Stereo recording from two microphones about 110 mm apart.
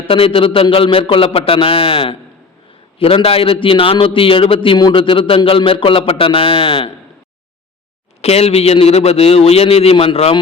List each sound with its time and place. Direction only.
0.1 s a man's voice: 55° left (ahead or behind)
8.2 s a man's voice: 70° left (ahead or behind)